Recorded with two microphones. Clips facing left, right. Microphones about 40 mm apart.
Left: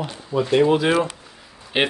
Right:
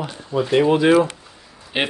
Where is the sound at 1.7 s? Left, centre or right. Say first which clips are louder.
Left 2 dB; centre.